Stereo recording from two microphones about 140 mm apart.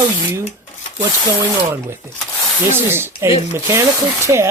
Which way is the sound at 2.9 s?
15° right (ahead or behind).